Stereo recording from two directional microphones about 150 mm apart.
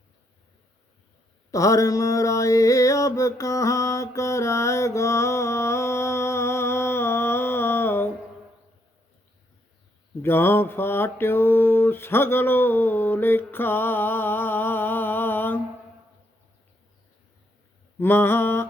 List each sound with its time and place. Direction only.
1.5 s a sound: 20° left (ahead or behind)
10.2 s mantra: 15° left (ahead or behind)
18.0 s mantra: 15° left (ahead or behind)